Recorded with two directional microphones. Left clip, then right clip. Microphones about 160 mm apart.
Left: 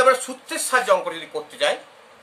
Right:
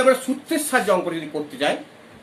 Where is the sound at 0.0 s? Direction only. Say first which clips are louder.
Even; 45° left (ahead or behind).